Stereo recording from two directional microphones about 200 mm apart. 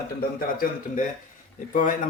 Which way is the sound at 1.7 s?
40° left (ahead or behind).